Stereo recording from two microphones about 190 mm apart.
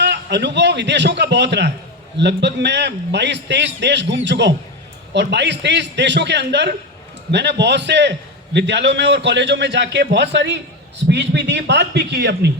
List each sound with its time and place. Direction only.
0.0 s a man's voice: 65° right (ahead or behind)